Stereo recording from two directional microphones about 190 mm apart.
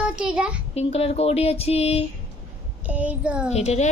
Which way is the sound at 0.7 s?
35° left (ahead or behind).